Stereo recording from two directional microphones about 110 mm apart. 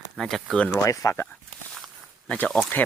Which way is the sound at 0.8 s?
30° left (ahead or behind).